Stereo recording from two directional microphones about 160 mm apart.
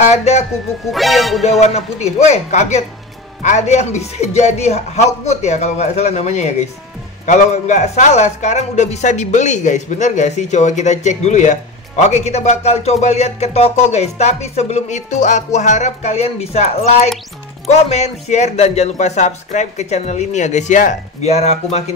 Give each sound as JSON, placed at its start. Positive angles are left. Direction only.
{"t": 0.1, "sound": "speech", "side_deg": 45}
{"t": 0.9, "sound": "music", "side_deg": 0}
{"t": 1.6, "sound": "speech", "side_deg": 45}